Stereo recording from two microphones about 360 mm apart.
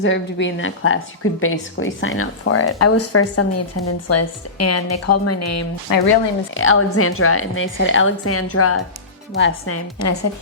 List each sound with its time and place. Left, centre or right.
0.0 s a woman's voice: left
5.9 s speech: left
6.5 s a woman's voice: left